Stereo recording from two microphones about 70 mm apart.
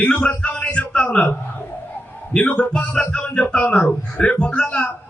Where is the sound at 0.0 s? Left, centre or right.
Centre.